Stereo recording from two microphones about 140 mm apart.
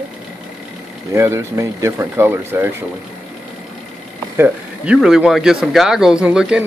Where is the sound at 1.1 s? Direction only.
20° right (ahead or behind).